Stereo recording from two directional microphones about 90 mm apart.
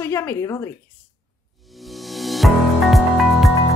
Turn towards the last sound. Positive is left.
turn(degrees=0)  # may be behind; listen again after turning